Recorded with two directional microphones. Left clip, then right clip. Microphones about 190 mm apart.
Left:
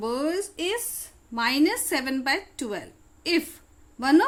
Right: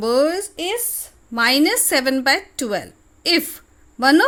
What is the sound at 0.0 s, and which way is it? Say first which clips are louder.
A woman's voice: right 10 dB; 40° right (ahead or behind).